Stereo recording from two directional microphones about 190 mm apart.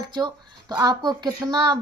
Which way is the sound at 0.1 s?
20° right (ahead or behind).